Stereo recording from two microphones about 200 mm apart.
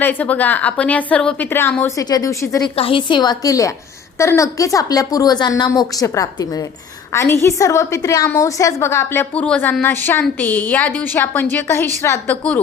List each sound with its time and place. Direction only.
0.0 s a woman's voice: 10° left (ahead or behind)
2.7 s a woman's voice: 25° left (ahead or behind); by 12.5 s 10° left (ahead or behind)